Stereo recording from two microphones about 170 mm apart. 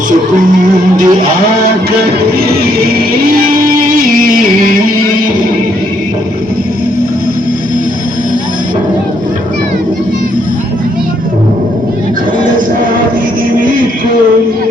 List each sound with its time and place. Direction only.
1.0 s speech: 25° right (ahead or behind)
4.1 s music: 55° right (ahead or behind)